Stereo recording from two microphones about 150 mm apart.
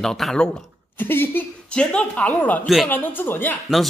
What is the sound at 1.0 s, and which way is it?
A man's voice, 15° left (ahead or behind).